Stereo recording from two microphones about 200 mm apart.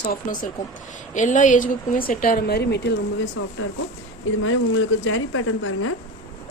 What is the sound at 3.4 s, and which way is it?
A woman's voice, 85° left.